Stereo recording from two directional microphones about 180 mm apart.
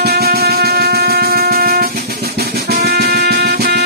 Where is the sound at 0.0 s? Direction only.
60° right (ahead or behind).